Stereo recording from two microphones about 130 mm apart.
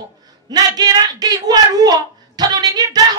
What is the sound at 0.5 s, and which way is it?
Speech, 30° right (ahead or behind).